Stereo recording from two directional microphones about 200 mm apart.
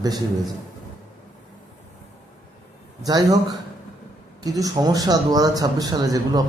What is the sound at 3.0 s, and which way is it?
Speech, 20° right (ahead or behind).